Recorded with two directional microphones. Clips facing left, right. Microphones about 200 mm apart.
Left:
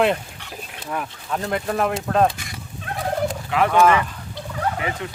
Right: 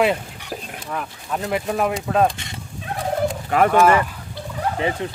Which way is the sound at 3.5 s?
45° right (ahead or behind).